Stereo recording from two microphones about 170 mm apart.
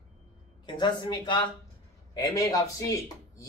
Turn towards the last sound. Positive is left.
turn(degrees=20)  # may be behind; listen again after turning